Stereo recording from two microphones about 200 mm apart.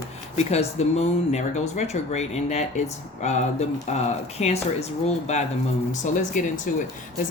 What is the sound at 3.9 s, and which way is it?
Speech, 35° left (ahead or behind).